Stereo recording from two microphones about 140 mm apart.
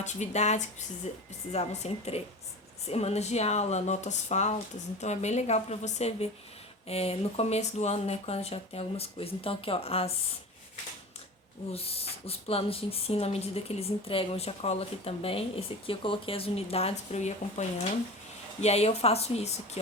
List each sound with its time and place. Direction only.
0.0 s speech: 55° left (ahead or behind)
11.7 s speech: 45° left (ahead or behind)